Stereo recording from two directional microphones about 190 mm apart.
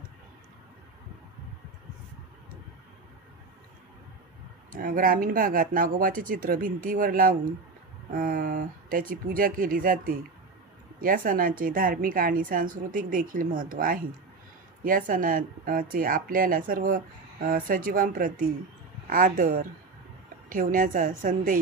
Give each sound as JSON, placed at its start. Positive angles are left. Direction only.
{"t": 4.7, "sound": "speech", "side_deg": -50}
{"t": 11.0, "sound": "speech", "side_deg": -50}